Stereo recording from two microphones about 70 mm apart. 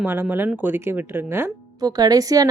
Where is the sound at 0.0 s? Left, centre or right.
Right.